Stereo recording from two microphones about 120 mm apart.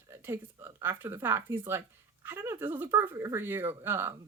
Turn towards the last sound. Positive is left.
turn(degrees=-20)  # may be behind; listen again after turning